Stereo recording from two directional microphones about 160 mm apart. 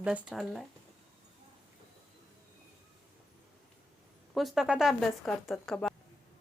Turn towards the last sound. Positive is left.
turn(degrees=5)  # may be behind; listen again after turning